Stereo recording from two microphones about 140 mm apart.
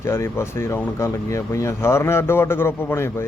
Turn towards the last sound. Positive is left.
turn(degrees=20)  # may be behind; listen again after turning